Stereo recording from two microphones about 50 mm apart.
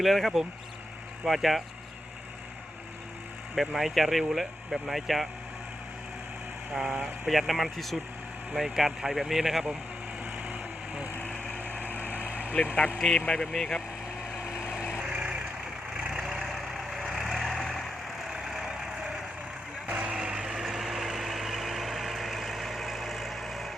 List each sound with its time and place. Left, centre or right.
0.0 s speech: centre
3.5 s speech: centre
6.7 s speech: centre
10.3 s vehicle: right
11.5 s vehicle: left
12.5 s speech: left; by 13.8 s centre
16.0 s vehicle: centre
16.3 s vehicle: centre
18.3 s vehicle: centre
19.9 s vehicle: centre